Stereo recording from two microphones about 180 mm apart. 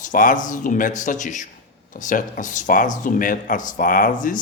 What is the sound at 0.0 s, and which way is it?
Speech, 50° left (ahead or behind).